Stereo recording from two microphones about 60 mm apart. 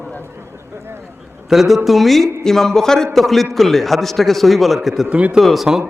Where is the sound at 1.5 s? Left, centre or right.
Centre.